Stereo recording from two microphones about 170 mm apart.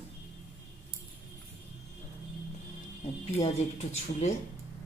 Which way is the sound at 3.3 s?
40° left (ahead or behind).